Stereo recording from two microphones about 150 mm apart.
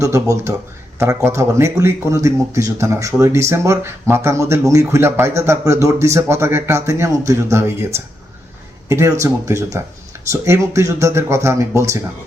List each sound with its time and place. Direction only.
0.0 s speech: 20° right (ahead or behind)
8.9 s speech: 20° right (ahead or behind)